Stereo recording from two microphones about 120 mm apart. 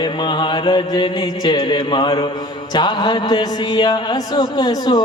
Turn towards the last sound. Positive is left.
turn(degrees=35)  # may be behind; listen again after turning